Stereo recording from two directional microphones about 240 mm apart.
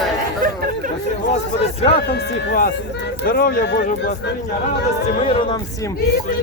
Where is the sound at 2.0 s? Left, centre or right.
Left.